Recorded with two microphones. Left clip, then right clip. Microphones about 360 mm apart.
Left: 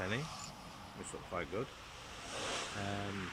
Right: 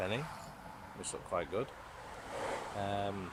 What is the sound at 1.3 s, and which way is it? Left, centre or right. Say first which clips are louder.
Speech: right 4 dB; centre.